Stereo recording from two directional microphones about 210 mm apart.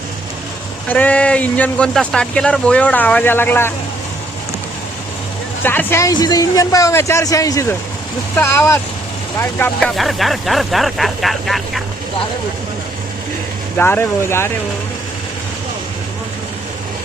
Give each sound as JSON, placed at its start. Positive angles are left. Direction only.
{"t": 0.9, "sound": "speech", "side_deg": 5}
{"t": 5.6, "sound": "speech", "side_deg": 10}
{"t": 13.7, "sound": "speech", "side_deg": 10}